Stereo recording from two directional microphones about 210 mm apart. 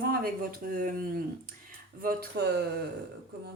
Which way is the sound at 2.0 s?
50° right (ahead or behind).